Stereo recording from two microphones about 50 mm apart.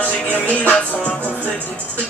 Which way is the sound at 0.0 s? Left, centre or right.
Left.